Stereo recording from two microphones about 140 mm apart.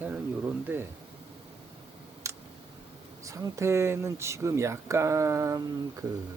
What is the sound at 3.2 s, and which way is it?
Speech, 25° right (ahead or behind).